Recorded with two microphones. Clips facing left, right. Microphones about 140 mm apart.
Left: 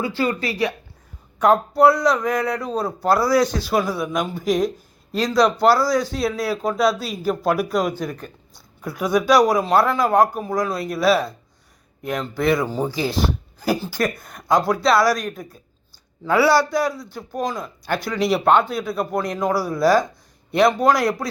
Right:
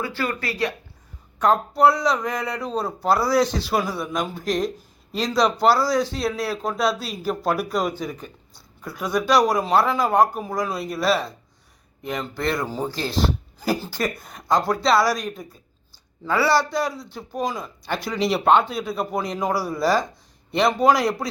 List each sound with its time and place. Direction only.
0.2 s speech: 25° left (ahead or behind)
1.4 s speech: 5° left (ahead or behind)